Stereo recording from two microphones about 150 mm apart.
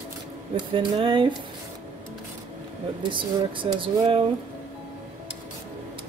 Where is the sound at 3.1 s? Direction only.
35° right (ahead or behind).